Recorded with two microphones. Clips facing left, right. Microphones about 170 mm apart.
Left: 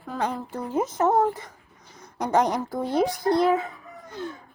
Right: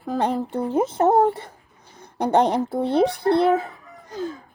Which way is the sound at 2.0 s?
30° right (ahead or behind).